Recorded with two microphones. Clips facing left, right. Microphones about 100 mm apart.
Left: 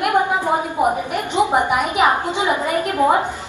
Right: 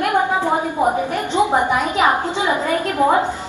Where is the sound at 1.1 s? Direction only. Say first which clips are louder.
Even; 15° left (ahead or behind).